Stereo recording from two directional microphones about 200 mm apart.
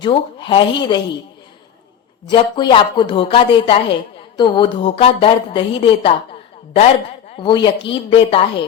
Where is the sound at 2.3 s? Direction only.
20° left (ahead or behind).